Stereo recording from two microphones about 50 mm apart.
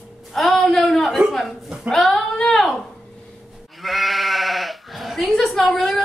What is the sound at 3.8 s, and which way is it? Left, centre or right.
Bleat, centre.